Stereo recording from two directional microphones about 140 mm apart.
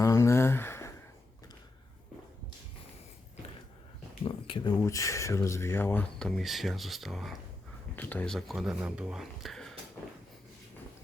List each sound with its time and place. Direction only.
0.0 s a sound: 20° left (ahead or behind)
4.2 s speech: 40° left (ahead or behind)
4.8 s speech: 20° left (ahead or behind); by 9.7 s centre (ahead or behind)